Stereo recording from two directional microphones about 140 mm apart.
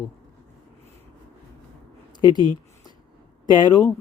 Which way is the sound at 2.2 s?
30° left (ahead or behind).